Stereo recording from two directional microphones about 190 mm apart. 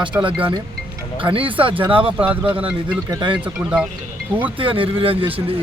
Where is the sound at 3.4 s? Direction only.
5° right (ahead or behind).